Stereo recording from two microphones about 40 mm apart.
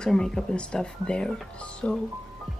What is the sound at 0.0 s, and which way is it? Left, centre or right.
Speech, centre.